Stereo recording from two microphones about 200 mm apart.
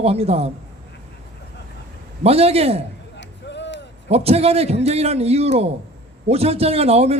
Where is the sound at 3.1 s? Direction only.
60° left (ahead or behind).